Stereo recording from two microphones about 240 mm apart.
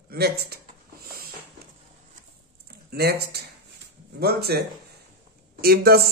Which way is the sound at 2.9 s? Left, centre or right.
Right.